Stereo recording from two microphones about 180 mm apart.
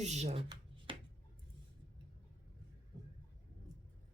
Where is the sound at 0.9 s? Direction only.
30° right (ahead or behind).